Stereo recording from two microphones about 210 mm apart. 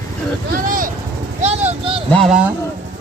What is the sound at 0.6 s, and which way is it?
Vehicle, 40° right (ahead or behind).